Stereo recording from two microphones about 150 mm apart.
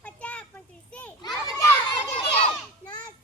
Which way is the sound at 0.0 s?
10° left (ahead or behind).